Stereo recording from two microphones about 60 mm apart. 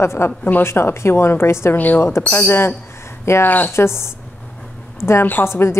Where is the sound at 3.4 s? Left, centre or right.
Left.